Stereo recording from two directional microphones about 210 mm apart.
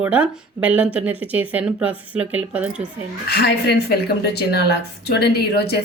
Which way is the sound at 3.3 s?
50° left (ahead or behind).